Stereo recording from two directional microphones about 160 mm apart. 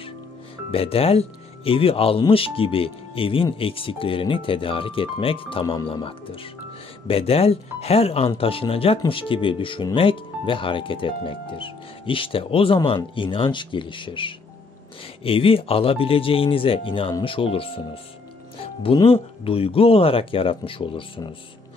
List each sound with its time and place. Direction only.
0.7 s speech: 35° left (ahead or behind)
18.6 s music: 35° left (ahead or behind)
19.0 s speech: 35° left (ahead or behind)